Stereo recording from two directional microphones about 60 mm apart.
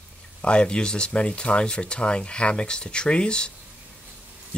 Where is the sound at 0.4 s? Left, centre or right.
Centre.